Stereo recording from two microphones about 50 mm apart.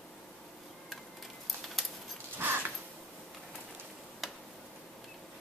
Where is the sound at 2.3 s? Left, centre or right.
Right.